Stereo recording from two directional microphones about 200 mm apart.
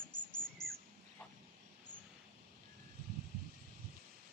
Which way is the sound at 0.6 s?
5° left (ahead or behind).